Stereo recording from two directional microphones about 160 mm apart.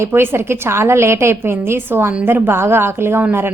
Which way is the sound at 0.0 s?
15° right (ahead or behind).